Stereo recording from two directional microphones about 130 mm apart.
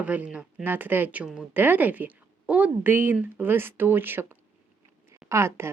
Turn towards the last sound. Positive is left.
turn(degrees=-20)  # may be behind; listen again after turning